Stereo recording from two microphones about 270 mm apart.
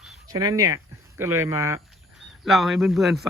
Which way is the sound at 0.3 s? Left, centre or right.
Centre.